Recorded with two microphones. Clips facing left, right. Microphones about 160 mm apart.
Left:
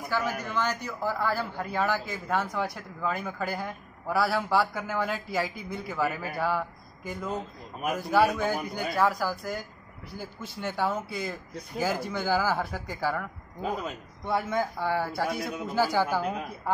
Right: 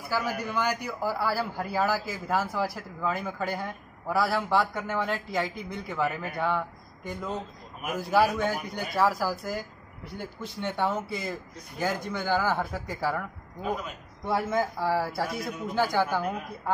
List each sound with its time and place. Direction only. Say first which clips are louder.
0.1 s a man's voice: right 1 dB; 10° right (ahead or behind)
14.2 s a man's voice: right 1 dB; 5° right (ahead or behind)